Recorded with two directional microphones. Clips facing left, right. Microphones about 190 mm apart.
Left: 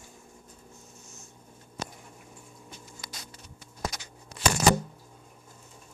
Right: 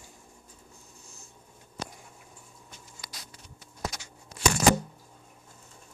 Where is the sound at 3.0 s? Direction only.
20° left (ahead or behind).